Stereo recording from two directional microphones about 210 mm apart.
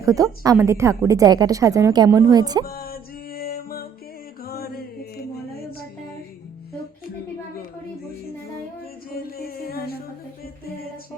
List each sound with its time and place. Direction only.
0.0 s a woman's voice: 15° right (ahead or behind)
2.6 s music: 45° left (ahead or behind)
9.1 s music: 45° left (ahead or behind)